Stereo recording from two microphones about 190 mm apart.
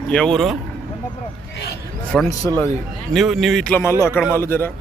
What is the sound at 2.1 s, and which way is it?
A man's voice, centre (ahead or behind).